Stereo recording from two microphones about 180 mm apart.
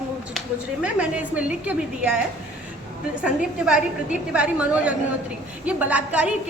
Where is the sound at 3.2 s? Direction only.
5° right (ahead or behind).